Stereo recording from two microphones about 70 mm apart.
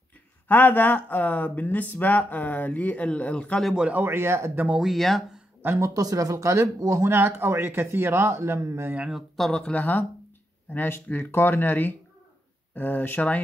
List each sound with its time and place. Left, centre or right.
0.5 s speech: left
3.7 s speech: centre
4.0 s a man's voice: right
4.8 s speech: centre
5.8 s a man's voice: right
9.5 s speech: centre
9.8 s speech: left